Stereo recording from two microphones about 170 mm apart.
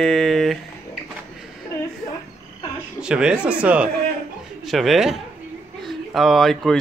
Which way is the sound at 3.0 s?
5° right (ahead or behind).